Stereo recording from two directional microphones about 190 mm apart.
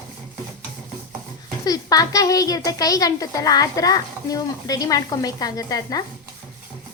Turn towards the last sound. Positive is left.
turn(degrees=20)  # may be behind; listen again after turning